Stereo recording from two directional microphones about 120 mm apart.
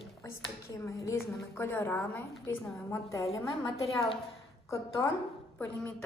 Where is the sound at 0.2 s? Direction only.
25° left (ahead or behind).